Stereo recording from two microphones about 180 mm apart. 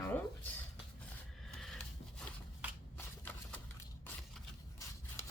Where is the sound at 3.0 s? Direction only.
10° left (ahead or behind).